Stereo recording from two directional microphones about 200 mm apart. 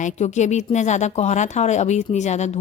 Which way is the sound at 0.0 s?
35° left (ahead or behind).